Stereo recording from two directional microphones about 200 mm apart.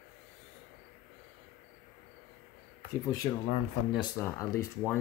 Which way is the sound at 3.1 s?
20° left (ahead or behind).